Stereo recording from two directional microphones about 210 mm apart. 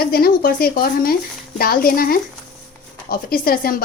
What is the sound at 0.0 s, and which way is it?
A woman's voice, 45° left (ahead or behind).